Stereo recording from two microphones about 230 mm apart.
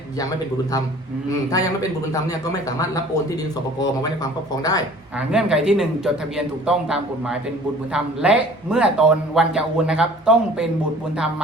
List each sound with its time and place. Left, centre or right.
1.3 s speech: centre
5.3 s a man's voice: centre